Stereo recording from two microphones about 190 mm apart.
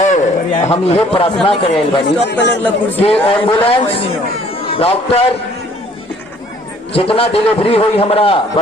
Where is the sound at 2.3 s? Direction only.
65° left (ahead or behind).